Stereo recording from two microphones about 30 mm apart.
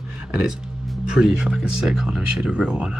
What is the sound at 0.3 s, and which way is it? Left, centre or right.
Speech, right.